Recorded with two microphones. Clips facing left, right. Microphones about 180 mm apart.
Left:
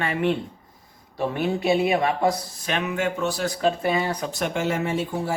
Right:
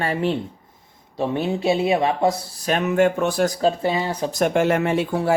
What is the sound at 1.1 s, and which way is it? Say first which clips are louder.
Speech: right 2 dB; 25° right (ahead or behind).